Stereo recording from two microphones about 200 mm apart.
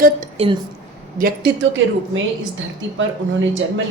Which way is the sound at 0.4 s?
30° right (ahead or behind).